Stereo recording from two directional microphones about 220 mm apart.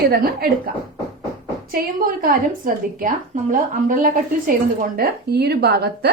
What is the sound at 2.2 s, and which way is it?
A woman's voice, 40° right (ahead or behind).